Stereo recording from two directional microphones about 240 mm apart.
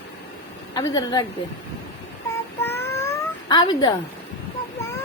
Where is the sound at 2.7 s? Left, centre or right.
Centre.